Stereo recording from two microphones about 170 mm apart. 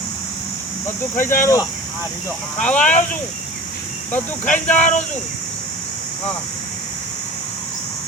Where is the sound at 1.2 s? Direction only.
50° left (ahead or behind).